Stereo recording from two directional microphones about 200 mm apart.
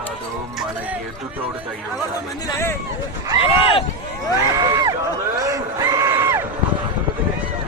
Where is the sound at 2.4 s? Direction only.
10° left (ahead or behind).